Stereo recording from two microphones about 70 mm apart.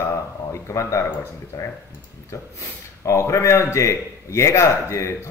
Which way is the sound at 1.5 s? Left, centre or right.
Left.